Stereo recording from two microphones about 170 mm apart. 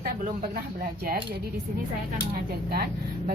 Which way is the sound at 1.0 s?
65° right (ahead or behind).